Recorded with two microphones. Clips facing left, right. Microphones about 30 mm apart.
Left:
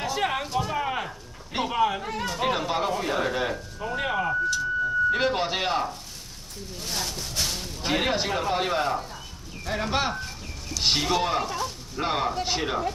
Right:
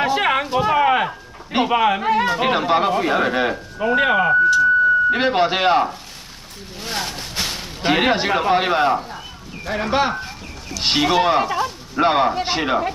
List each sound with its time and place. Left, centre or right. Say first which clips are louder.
0.0 s a sound: right 9 dB; right
0.7 s a sound: right 12 dB; right
1.8 s speech: right 6 dB; right
2.2 s speech: right 8 dB; right
3.8 s speech: right 11 dB; right
5.1 s speech: right 7 dB; right
9.7 s speech: right 7 dB; right